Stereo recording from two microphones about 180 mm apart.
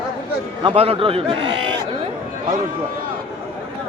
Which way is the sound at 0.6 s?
35° right (ahead or behind).